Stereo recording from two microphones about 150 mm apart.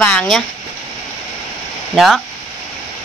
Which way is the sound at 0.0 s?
5° left (ahead or behind).